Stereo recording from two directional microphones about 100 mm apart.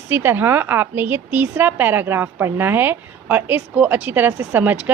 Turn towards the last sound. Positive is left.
turn(degrees=-15)  # may be behind; listen again after turning